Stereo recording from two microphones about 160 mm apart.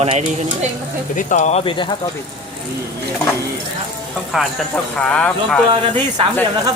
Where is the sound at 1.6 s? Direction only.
30° left (ahead or behind).